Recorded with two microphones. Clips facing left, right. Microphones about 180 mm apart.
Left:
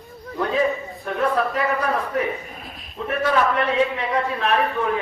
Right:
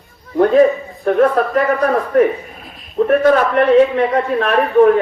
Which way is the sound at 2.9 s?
50° right (ahead or behind).